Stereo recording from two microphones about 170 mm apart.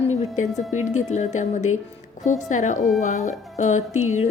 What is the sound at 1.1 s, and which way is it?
A woman's voice, 45° left (ahead or behind).